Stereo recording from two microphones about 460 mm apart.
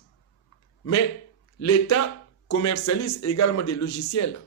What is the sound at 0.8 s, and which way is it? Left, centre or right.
Speech, left.